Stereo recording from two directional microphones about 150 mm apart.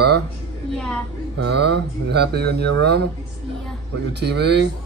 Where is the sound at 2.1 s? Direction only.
90° right.